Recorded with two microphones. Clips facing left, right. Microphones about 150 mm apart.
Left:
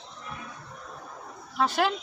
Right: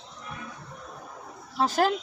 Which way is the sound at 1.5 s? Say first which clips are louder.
Right 1 dB; 40° right (ahead or behind).